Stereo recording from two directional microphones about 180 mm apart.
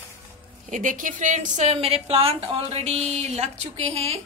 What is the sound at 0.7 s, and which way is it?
A woman's voice, 45° right (ahead or behind).